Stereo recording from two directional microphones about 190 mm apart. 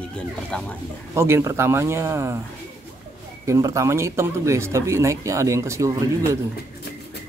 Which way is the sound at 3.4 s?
15° right (ahead or behind).